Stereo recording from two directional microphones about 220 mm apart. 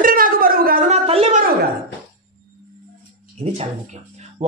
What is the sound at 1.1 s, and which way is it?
Speech, 30° right (ahead or behind).